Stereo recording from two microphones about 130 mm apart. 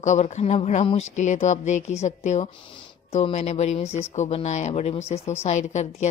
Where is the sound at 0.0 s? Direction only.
65° left (ahead or behind).